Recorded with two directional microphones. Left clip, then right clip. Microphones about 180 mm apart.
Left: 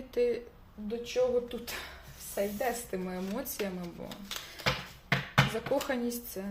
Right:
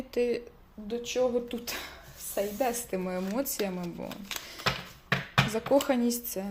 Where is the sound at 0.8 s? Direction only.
50° right (ahead or behind).